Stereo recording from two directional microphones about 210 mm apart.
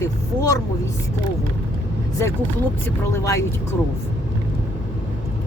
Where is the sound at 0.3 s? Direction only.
15° left (ahead or behind).